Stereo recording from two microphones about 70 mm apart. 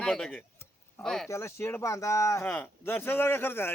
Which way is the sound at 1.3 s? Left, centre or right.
Left.